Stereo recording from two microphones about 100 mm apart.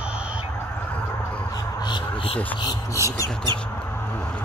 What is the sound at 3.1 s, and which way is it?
Squawk, 35° left (ahead or behind).